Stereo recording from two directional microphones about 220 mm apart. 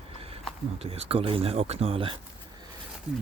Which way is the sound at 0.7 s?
25° right (ahead or behind).